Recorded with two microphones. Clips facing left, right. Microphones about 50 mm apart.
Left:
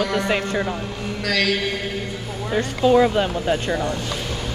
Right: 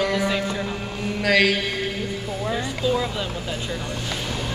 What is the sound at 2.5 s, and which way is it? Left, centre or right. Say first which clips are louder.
Speech: left 9 dB; left.